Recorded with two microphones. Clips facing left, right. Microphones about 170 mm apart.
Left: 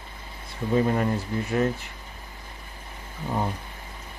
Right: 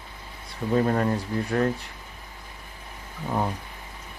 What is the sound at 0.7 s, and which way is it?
Speech, 15° left (ahead or behind).